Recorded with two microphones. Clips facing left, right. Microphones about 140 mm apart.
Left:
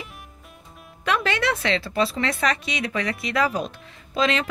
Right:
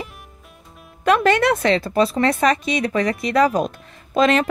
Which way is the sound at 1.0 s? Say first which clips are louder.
Right 8 dB; 45° right (ahead or behind).